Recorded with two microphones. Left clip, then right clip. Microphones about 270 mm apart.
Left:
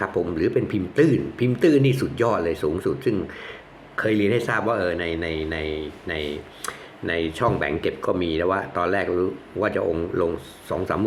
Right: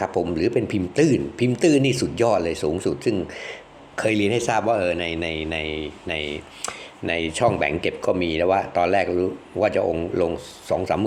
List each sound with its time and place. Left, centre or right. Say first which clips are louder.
0.3 s speech: right 1 dB; centre